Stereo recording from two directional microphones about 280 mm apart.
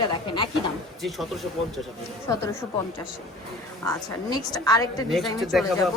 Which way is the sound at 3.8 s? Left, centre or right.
Centre.